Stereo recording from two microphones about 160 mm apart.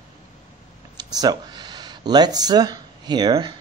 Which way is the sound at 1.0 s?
25° right (ahead or behind).